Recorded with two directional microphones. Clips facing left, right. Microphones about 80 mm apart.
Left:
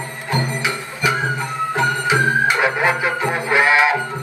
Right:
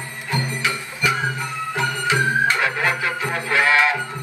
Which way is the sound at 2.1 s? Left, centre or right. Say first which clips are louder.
Left 1 dB; centre.